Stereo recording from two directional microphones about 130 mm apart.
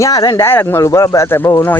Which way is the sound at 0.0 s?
25° left (ahead or behind).